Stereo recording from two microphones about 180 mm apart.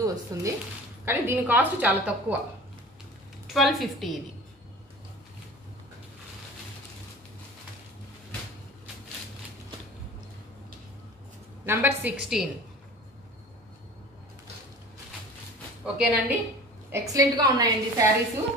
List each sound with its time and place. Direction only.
0.0 s a woman's voice: 20° right (ahead or behind)
3.5 s a woman's voice: centre (ahead or behind)
11.6 s a woman's voice: 10° right (ahead or behind)
15.8 s a woman's voice: 5° right (ahead or behind)
16.9 s a woman's voice: 20° right (ahead or behind)